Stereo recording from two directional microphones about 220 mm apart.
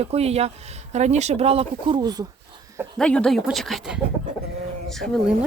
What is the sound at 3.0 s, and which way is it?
Speech, 5° left (ahead or behind).